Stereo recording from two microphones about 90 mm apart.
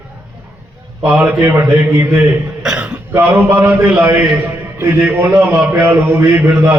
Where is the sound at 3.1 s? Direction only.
30° right (ahead or behind).